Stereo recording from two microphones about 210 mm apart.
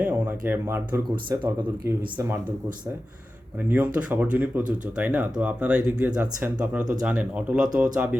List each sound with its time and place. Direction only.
0.0 s speech: 10° right (ahead or behind)
1.1 s speech: 20° right (ahead or behind)
3.7 s speech: 10° right (ahead or behind)